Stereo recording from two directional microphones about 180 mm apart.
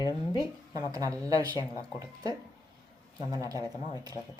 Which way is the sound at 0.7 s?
20° right (ahead or behind).